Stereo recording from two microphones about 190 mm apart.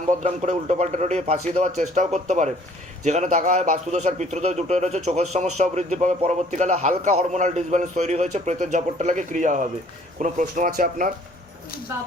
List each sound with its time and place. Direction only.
0.1 s a man's voice: 40° right (ahead or behind)